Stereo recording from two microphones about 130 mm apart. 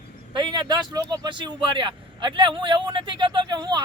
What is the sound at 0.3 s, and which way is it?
A man's voice, 35° right (ahead or behind).